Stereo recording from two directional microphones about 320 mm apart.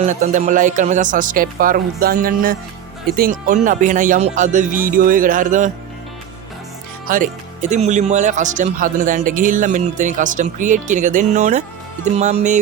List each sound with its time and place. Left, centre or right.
0.0 s speech: right
7.1 s speech: right